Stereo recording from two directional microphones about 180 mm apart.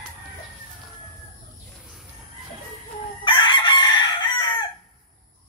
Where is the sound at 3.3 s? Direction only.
25° left (ahead or behind).